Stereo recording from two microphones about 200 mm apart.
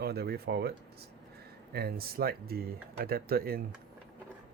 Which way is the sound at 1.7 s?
50° right (ahead or behind).